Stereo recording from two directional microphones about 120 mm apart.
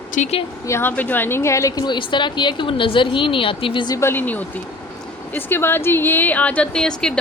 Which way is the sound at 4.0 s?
20° left (ahead or behind).